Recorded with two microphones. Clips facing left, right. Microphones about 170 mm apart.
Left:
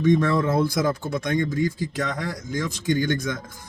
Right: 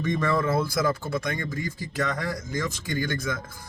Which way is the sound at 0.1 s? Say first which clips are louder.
Left 3 dB; 20° left (ahead or behind).